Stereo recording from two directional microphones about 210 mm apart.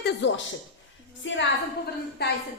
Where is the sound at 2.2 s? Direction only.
50° left (ahead or behind).